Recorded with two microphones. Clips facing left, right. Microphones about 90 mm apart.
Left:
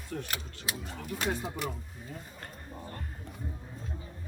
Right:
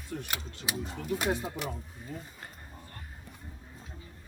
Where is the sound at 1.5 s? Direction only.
Centre (ahead or behind).